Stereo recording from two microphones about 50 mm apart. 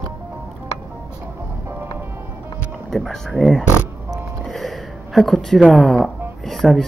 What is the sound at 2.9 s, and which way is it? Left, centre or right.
A woman's voice, centre.